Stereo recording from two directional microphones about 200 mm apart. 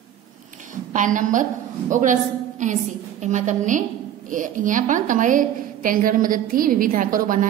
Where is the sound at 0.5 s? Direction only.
40° right (ahead or behind).